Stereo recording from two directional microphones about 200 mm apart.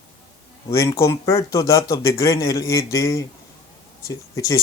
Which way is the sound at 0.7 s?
15° left (ahead or behind).